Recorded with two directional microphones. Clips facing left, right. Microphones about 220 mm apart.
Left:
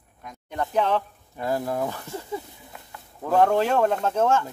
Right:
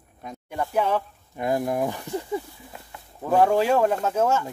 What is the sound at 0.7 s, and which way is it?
Speech, 10° right (ahead or behind).